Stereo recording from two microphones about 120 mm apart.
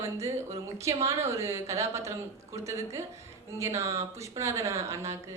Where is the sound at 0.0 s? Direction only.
25° right (ahead or behind).